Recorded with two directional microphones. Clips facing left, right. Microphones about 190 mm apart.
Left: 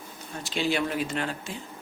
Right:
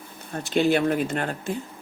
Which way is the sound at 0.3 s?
55° right (ahead or behind).